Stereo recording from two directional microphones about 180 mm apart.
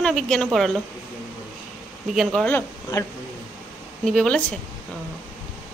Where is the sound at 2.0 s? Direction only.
Centre (ahead or behind).